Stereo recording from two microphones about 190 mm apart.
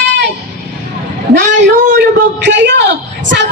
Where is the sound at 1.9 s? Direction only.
65° right (ahead or behind).